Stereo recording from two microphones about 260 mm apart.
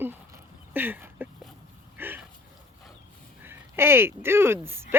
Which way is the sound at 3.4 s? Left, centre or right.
Centre.